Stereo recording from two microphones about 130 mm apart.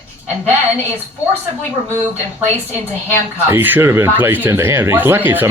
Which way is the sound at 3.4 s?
15° right (ahead or behind).